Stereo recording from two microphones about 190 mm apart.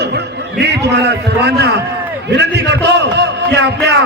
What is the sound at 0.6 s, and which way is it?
A man's voice, 65° right (ahead or behind).